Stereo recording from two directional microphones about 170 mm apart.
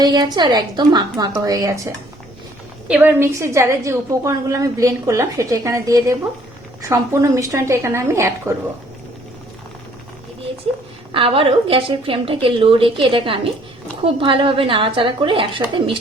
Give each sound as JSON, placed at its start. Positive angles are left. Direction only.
{"t": 0.0, "sound": "a woman's voice", "side_deg": -25}
{"t": 2.8, "sound": "a woman's voice", "side_deg": -5}
{"t": 11.1, "sound": "a woman's voice", "side_deg": -30}